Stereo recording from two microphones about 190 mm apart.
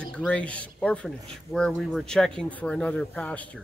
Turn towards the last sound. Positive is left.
turn(degrees=5)  # may be behind; listen again after turning